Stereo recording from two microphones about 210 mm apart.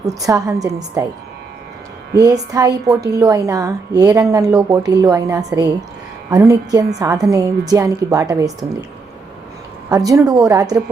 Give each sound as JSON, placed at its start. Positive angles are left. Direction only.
{"t": 0.2, "sound": "speech", "side_deg": -15}
{"t": 2.1, "sound": "speech", "side_deg": -15}
{"t": 9.9, "sound": "speech", "side_deg": -15}